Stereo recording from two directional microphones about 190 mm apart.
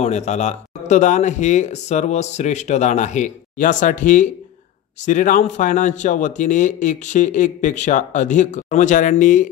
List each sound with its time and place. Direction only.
0.0 s speech: 35° left (ahead or behind)